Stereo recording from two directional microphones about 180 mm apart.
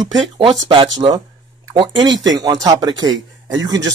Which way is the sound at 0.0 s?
30° right (ahead or behind).